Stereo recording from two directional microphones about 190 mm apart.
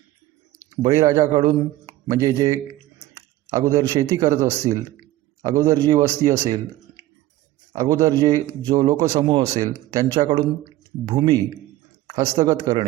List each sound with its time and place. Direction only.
0.8 s a man's voice: 20° right (ahead or behind)
1.2 s speech: 35° right (ahead or behind)
2.0 s a man's voice: 20° right (ahead or behind)
7.8 s a man's voice: 20° right (ahead or behind)